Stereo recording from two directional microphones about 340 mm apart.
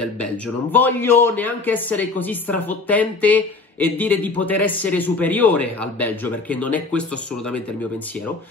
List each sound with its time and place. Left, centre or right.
0.7 s speech: centre